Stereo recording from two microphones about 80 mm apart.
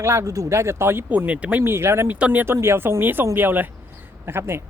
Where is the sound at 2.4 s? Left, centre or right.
Right.